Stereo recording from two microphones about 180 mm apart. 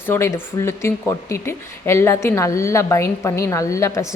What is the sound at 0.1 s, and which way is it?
Speech, 15° left (ahead or behind).